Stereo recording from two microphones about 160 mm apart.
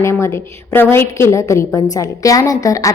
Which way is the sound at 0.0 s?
15° left (ahead or behind).